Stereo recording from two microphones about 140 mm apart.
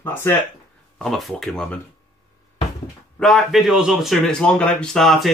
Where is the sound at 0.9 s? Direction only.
Centre (ahead or behind).